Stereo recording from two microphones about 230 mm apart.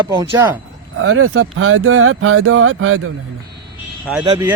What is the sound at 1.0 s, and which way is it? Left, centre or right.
Speech, right.